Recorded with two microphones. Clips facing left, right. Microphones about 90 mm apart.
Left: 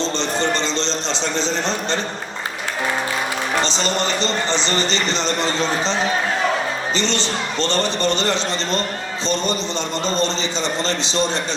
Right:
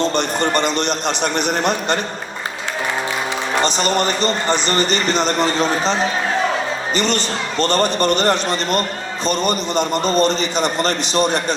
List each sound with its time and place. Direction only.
0.0 s a man's voice: 60° right (ahead or behind)
3.6 s a man's voice: 55° right (ahead or behind)